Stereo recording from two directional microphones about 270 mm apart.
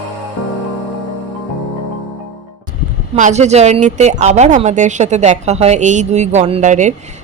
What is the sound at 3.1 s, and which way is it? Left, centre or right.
Speech, right.